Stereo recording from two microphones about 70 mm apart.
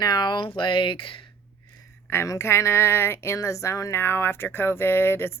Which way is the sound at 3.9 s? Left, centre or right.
Left.